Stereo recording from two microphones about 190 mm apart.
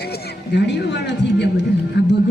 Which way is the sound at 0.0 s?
60° left (ahead or behind).